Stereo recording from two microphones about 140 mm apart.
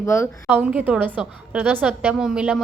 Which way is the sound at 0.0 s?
20° left (ahead or behind).